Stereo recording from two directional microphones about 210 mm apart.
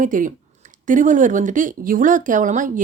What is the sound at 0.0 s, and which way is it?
A woman's voice, 40° right (ahead or behind).